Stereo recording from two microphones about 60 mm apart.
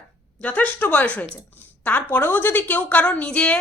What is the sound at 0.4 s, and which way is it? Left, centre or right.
Speech, left.